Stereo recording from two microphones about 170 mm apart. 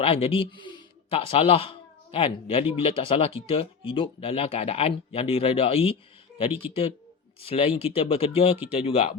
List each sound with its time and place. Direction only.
0.0 s speech: 35° left (ahead or behind)
7.4 s speech: 35° left (ahead or behind)